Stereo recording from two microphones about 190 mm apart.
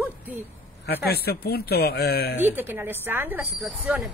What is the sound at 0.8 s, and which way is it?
A man's voice, 60° left (ahead or behind).